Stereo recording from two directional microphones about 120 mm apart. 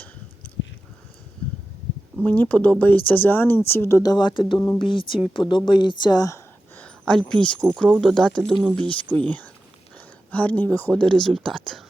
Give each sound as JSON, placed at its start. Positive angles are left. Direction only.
{"t": 2.2, "sound": "speech", "side_deg": 15}
{"t": 4.1, "sound": "speech", "side_deg": 40}
{"t": 6.7, "sound": "speech", "side_deg": 5}